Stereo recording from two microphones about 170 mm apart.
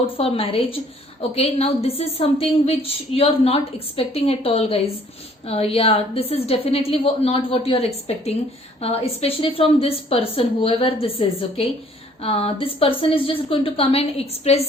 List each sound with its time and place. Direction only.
0.2 s a woman's voice: 35° left (ahead or behind)